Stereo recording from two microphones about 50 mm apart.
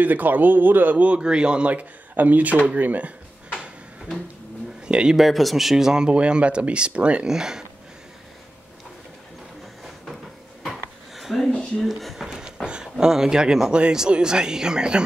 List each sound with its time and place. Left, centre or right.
0.0 s speech: right
1.0 s speech: right
1.7 s speech: right
4.8 s a sound: centre
5.1 s speech: centre
6.0 s speech: right
7.2 s speech: centre
10.6 s a sound: centre
12.6 s speech: centre